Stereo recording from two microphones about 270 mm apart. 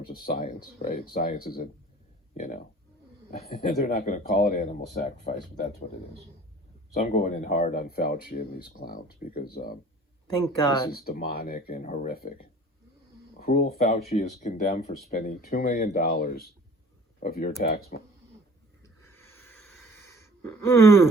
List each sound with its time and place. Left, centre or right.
0.1 s speech: left
6.9 s speech: left
10.9 s speech: left
18.8 s a sound: centre